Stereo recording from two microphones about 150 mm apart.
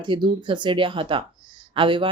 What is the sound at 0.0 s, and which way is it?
Speech, 35° right (ahead or behind).